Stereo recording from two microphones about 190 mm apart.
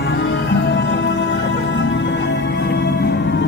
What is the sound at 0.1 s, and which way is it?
Music, 80° left.